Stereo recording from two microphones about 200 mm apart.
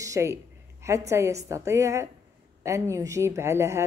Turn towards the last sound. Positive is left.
turn(degrees=-15)  # may be behind; listen again after turning